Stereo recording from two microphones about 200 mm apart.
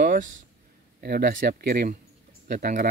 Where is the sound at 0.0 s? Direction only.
40° right (ahead or behind).